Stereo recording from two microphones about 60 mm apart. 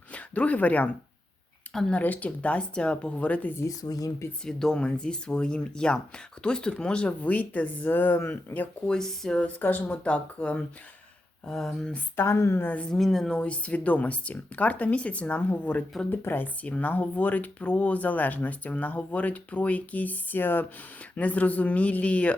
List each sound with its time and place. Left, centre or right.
0.1 s speech: left
1.9 s speech: left
3.7 s speech: left
4.4 s speech: centre; by 8.7 s left
8.9 s speech: centre
9.4 s speech: left
11.4 s speech: centre
12.1 s a woman's voice: left
13.0 s speech: centre
13.4 s speech: left
16.0 s speech: left